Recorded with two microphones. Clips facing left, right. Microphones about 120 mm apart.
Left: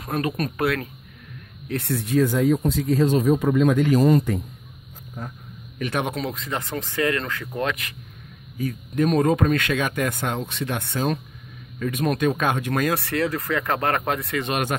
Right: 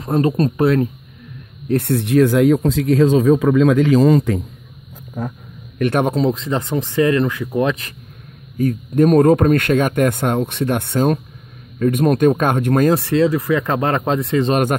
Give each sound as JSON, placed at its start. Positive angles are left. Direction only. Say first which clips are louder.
{"t": 0.0, "sound": "speech", "louder": "right 9 dB", "side_deg": -30}
{"t": 1.8, "sound": "speech", "louder": "right 6 dB", "side_deg": -60}
{"t": 5.8, "sound": "speech", "louder": "right 9 dB", "side_deg": -55}
{"t": 6.0, "sound": "speech", "louder": "right 10 dB", "side_deg": -30}
{"t": 8.5, "sound": "speech", "louder": "right 8 dB", "side_deg": -45}
{"t": 12.9, "sound": "speech", "louder": "right 8 dB", "side_deg": -20}